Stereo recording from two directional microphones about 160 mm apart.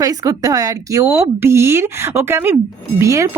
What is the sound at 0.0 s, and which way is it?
Speech, 20° right (ahead or behind).